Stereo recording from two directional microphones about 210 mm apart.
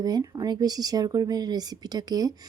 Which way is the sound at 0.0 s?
15° right (ahead or behind).